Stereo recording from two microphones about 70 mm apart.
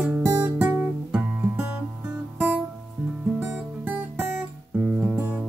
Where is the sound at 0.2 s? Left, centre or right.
Right.